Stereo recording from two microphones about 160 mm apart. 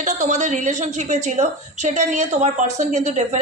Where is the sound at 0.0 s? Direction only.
50° right (ahead or behind).